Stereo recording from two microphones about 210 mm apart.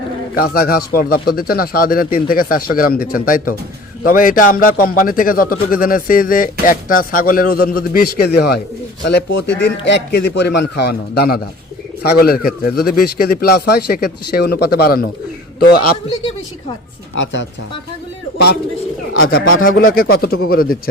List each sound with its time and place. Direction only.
0.3 s speech: 45° left (ahead or behind)
19.6 s speech: 45° left (ahead or behind)